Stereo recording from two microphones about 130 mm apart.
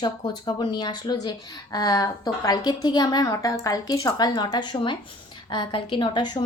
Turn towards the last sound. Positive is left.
turn(degrees=35)  # may be behind; listen again after turning